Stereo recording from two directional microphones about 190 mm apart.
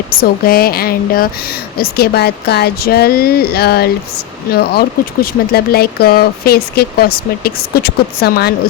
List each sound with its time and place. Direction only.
0.2 s a woman's voice: 50° left (ahead or behind)